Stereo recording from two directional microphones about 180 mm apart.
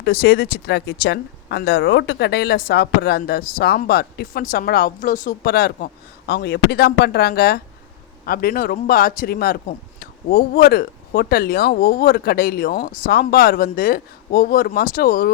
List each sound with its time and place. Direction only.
0.0 s speech: 60° left (ahead or behind)